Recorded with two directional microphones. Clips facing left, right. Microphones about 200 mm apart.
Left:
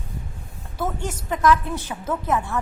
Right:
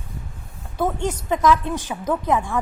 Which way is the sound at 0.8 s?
20° right (ahead or behind).